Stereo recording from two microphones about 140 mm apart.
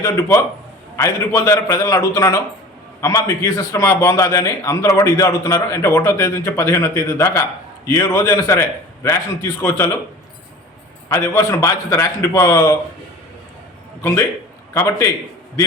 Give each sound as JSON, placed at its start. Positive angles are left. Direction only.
{"t": 0.0, "sound": "a man's voice", "side_deg": 25}
{"t": 11.1, "sound": "a man's voice", "side_deg": 20}
{"t": 14.7, "sound": "a man's voice", "side_deg": 20}